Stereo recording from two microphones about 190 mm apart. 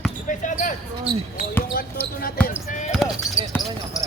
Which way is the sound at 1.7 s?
50° left (ahead or behind).